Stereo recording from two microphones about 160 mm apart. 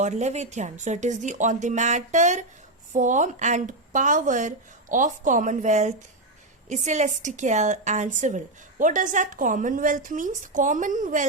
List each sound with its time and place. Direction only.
0.0 s a woman's voice: 45° right (ahead or behind)